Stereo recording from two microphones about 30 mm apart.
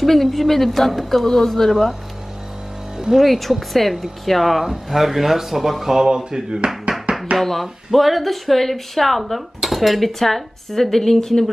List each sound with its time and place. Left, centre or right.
0.0 s speech: centre
3.1 s speech: centre
6.0 s speech: right
7.3 s speech: centre